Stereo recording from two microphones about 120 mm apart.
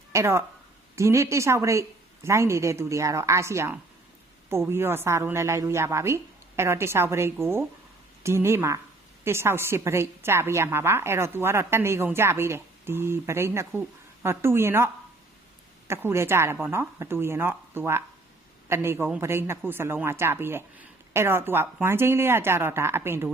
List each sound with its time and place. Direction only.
0.1 s a woman's voice: 25° right (ahead or behind)
15.9 s a woman's voice: 20° right (ahead or behind)